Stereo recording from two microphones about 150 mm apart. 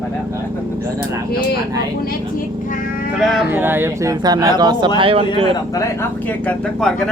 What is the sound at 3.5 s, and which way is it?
Speech, 15° right (ahead or behind).